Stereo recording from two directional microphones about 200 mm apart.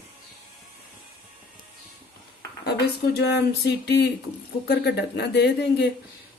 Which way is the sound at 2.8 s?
55° left (ahead or behind).